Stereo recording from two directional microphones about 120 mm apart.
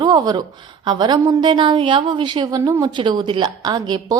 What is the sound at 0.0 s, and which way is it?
A woman's voice, 35° right (ahead or behind).